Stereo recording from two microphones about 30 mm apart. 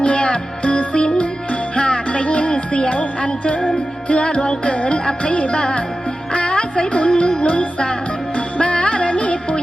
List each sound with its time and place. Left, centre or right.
0.0 s music: left
4.7 s music: left